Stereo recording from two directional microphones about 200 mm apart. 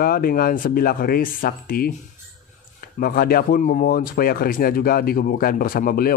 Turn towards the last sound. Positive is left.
turn(degrees=45)  # may be behind; listen again after turning